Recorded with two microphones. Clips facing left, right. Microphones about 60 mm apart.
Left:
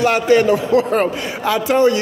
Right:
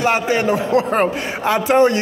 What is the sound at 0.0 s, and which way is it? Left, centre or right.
A man's voice, right.